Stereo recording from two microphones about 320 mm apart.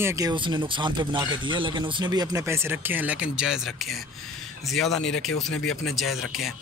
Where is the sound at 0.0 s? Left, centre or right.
Centre.